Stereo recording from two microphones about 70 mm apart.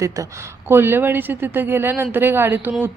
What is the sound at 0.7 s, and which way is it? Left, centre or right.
A woman's voice, right.